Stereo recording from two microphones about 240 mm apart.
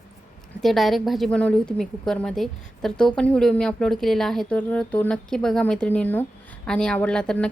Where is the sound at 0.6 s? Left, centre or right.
Centre.